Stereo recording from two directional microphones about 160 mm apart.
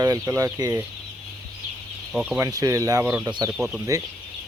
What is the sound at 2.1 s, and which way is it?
Speech, 5° right (ahead or behind).